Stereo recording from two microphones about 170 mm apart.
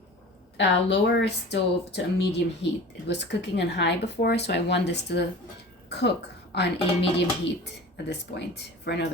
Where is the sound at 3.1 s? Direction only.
90° left.